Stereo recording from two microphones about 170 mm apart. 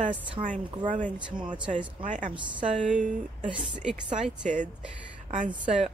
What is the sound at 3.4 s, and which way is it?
Speech, 30° right (ahead or behind).